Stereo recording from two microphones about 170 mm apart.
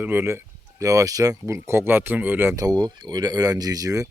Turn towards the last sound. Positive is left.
turn(degrees=-20)  # may be behind; listen again after turning